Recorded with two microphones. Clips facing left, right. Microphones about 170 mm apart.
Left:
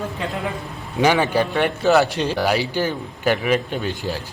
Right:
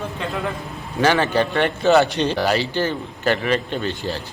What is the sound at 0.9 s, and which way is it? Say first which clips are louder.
A man's voice: even; 10° left (ahead or behind).